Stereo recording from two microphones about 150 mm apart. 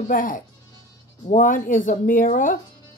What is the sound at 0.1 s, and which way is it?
A woman's voice, 65° left (ahead or behind).